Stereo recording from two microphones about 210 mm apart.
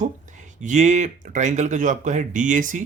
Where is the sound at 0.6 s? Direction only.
35° right (ahead or behind).